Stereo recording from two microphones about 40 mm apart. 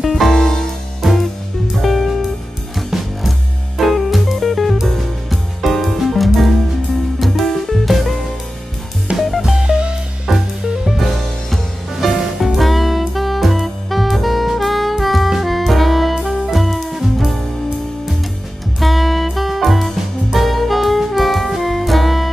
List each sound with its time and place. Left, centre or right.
0.0 s music: centre
0.4 s music: centre
1.0 s music: centre
9.4 s music: centre
10.3 s music: centre
11.9 s music: centre
18.8 s music: centre